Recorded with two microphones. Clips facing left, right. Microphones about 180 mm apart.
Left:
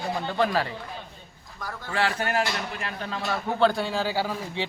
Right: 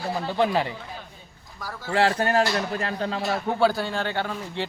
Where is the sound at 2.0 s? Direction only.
35° right (ahead or behind).